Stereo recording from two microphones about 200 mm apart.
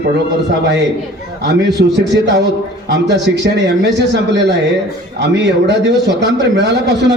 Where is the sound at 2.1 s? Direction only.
55° right (ahead or behind).